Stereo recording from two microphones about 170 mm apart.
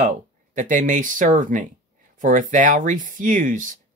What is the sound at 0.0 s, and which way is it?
Speech, 50° right (ahead or behind).